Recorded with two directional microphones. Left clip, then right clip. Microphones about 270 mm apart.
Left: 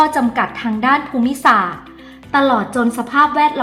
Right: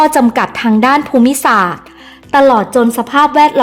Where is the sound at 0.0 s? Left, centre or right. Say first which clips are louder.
Right 5 dB; right.